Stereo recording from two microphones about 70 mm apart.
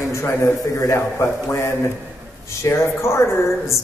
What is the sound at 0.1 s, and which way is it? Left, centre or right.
A woman's voice, left.